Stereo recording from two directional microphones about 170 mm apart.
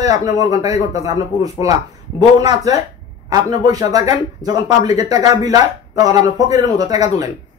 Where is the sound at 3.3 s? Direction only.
20° right (ahead or behind).